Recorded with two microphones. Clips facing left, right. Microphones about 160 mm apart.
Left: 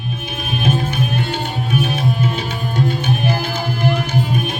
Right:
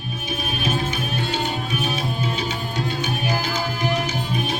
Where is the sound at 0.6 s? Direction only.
55° left (ahead or behind).